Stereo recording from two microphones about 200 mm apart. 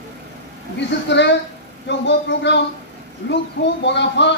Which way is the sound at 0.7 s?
60° left (ahead or behind).